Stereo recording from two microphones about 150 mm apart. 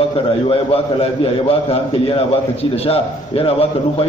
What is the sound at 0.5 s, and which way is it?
A man's voice, 35° left (ahead or behind).